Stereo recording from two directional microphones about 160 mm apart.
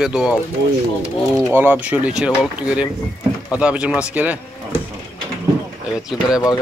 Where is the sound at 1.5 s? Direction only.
10° right (ahead or behind).